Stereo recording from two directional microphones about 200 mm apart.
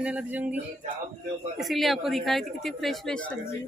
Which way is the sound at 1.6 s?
Centre (ahead or behind).